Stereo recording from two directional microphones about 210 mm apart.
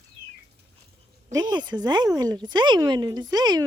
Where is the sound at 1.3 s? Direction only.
20° right (ahead or behind).